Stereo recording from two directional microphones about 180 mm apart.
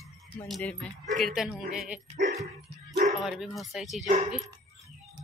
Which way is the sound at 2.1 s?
40° right (ahead or behind).